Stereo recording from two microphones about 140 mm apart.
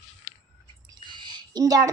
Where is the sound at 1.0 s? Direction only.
30° right (ahead or behind).